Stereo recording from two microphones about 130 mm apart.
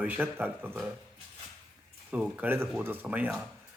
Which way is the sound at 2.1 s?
10° right (ahead or behind).